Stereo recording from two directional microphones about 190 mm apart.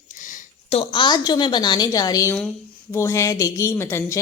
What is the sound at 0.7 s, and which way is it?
A woman's voice, 30° left (ahead or behind).